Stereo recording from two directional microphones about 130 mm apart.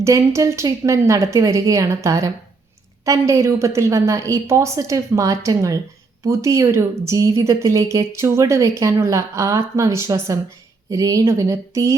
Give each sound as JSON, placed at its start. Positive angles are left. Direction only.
{"t": 0.0, "sound": "a woman's voice", "side_deg": -20}